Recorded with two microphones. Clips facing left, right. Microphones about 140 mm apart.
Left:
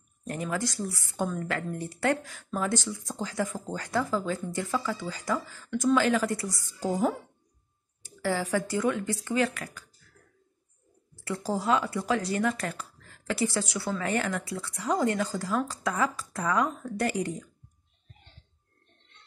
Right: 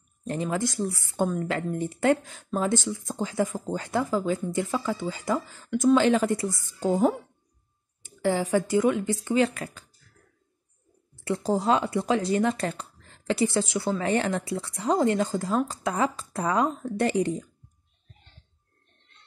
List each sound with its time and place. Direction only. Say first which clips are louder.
0.3 s speech: right 4 dB; 25° right (ahead or behind)
11.2 s speech: right 4 dB; 20° right (ahead or behind)